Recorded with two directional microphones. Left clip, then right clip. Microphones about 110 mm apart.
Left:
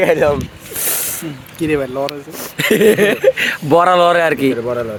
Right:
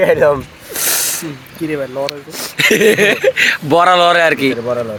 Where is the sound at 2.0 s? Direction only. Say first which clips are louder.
Right 2 dB; 35° left (ahead or behind).